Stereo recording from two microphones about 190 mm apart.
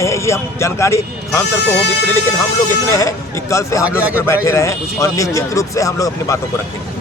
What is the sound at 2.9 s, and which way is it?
Speech, 15° left (ahead or behind).